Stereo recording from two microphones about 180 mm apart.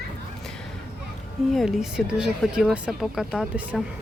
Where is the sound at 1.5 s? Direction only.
Centre (ahead or behind).